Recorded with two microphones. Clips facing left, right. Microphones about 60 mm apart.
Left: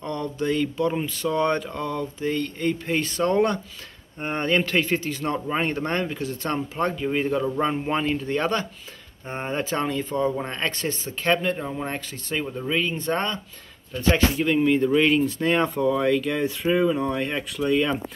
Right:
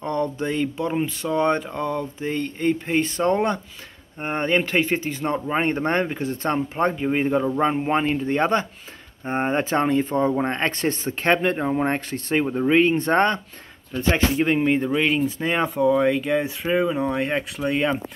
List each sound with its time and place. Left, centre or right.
0.0 s speech: right
13.9 s speech: right
14.9 s speech: centre
17.4 s speech: right